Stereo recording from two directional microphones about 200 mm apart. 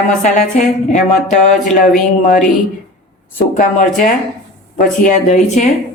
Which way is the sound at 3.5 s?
40° left (ahead or behind).